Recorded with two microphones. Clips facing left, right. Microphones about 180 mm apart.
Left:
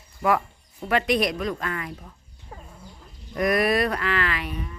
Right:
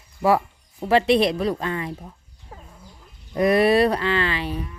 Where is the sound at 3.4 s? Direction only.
30° right (ahead or behind).